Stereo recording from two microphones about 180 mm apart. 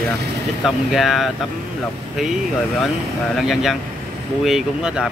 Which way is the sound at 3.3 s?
Centre (ahead or behind).